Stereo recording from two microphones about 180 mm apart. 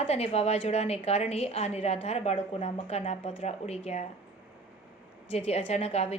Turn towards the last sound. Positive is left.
turn(degrees=35)  # may be behind; listen again after turning